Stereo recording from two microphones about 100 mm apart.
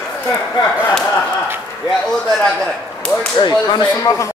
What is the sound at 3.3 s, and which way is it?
Speech, 50° left (ahead or behind).